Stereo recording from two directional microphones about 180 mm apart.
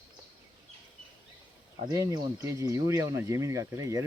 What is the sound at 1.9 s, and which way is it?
Speech, 20° right (ahead or behind).